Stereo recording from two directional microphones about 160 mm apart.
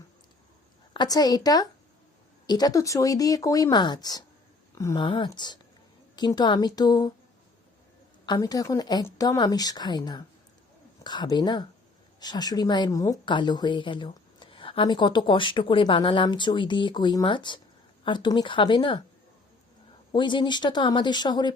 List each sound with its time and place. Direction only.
0.9 s a woman's voice: 25° left (ahead or behind)
4.7 s a sound: 15° left (ahead or behind)
4.9 s a woman's voice: 30° left (ahead or behind)
8.3 s a woman's voice: 25° left (ahead or behind)
20.1 s a woman's voice: 30° left (ahead or behind)